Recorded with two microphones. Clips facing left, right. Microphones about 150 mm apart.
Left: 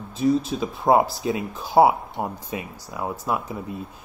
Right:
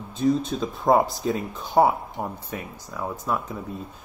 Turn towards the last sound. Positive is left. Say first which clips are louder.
# left 1 dB
turn(degrees=10)  # may be behind; listen again after turning